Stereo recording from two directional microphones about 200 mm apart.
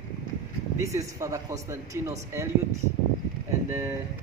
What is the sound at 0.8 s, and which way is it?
A man's voice, 15° right (ahead or behind).